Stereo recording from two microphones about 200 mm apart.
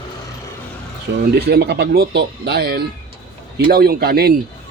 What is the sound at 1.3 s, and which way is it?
Speech, 55° right (ahead or behind).